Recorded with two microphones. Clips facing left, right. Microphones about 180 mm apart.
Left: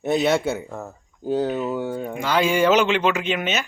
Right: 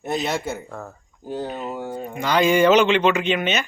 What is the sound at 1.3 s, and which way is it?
Speech, 90° left.